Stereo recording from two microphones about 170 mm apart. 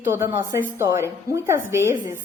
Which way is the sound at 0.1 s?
15° right (ahead or behind).